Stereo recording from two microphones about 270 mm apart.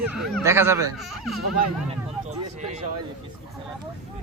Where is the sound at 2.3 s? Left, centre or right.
Right.